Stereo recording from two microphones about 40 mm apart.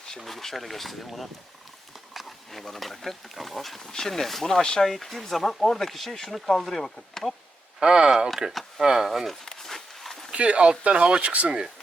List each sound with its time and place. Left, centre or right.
0.3 s speech: centre
4.9 s speech: centre
7.8 s speech: right
9.1 s speech: centre
9.6 s a sound: centre
10.3 s speech: right